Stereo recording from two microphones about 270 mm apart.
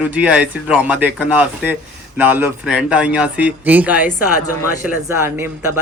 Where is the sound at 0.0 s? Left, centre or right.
Centre.